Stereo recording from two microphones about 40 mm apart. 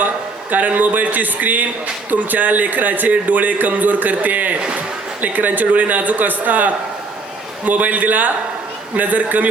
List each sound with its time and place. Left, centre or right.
0.5 s speech: right